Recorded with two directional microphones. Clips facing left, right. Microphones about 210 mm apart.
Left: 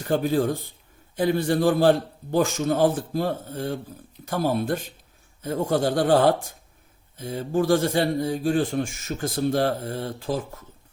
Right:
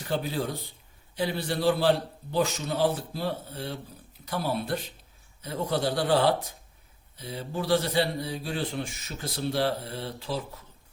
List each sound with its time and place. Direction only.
0.1 s a man's voice: 50° left (ahead or behind)